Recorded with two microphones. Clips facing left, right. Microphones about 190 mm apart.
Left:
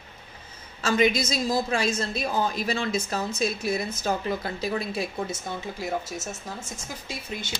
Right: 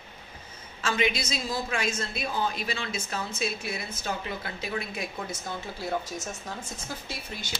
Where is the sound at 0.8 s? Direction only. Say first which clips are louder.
Left 5 dB; 40° left (ahead or behind).